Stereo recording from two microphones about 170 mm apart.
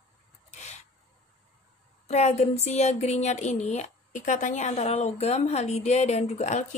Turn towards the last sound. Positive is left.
turn(degrees=45)  # may be behind; listen again after turning